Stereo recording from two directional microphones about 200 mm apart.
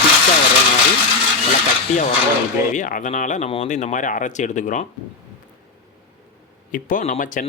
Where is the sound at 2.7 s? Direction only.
40° left (ahead or behind).